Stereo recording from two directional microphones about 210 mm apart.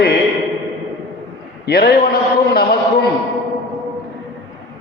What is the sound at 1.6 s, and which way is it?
A man's voice, 50° left (ahead or behind).